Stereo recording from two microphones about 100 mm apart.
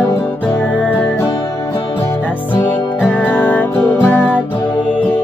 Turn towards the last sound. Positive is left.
turn(degrees=20)  # may be behind; listen again after turning